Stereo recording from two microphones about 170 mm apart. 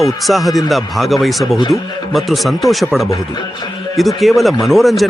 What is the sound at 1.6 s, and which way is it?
Speech, 20° left (ahead or behind).